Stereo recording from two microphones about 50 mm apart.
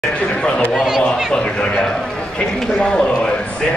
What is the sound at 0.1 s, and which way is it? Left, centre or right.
Chatter, left.